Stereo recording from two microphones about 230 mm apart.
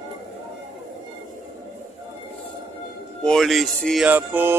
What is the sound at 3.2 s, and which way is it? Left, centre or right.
Speech, centre.